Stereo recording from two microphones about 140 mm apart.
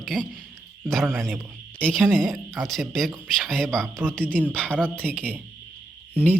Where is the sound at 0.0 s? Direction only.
5° left (ahead or behind).